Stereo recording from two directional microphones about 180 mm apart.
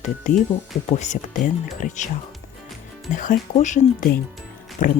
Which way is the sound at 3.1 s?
45° left (ahead or behind).